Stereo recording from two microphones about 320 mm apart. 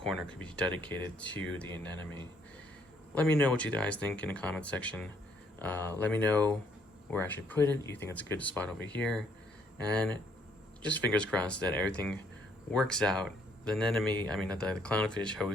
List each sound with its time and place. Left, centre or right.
0.0 s speech: centre
3.2 s speech: centre
10.8 s speech: centre